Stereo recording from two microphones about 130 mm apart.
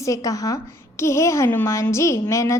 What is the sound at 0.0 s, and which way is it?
A woman's voice, 25° left (ahead or behind).